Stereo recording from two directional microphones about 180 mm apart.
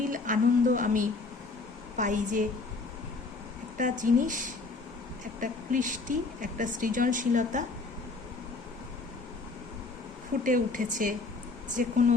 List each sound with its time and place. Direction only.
0.0 s a sound: 50° right (ahead or behind)
2.0 s speech: 45° right (ahead or behind)
3.8 s speech: 45° right (ahead or behind)
10.4 s speech: 45° right (ahead or behind)